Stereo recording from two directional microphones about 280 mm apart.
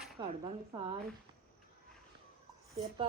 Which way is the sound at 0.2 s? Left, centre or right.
Centre.